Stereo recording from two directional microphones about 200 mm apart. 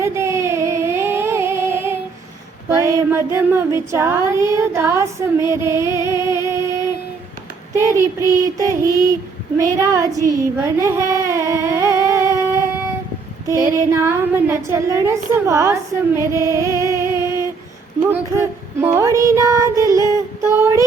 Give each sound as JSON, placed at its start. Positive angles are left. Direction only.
{"t": 0.0, "sound": "a sound", "side_deg": -15}
{"t": 2.6, "sound": "a woman's voice", "side_deg": -15}
{"t": 7.7, "sound": "a woman's voice", "side_deg": -15}
{"t": 12.0, "sound": "a sound", "side_deg": -15}
{"t": 13.5, "sound": "a woman's voice", "side_deg": -15}
{"t": 18.1, "sound": "child singing", "side_deg": -10}